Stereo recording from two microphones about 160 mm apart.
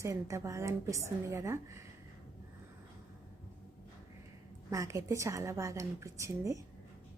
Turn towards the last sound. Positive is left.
turn(degrees=-20)  # may be behind; listen again after turning